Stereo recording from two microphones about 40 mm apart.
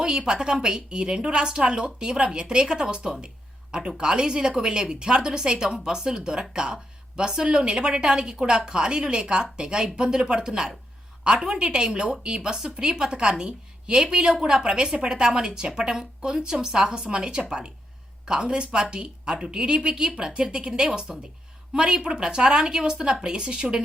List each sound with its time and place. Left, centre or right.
0.0 s a woman's voice: right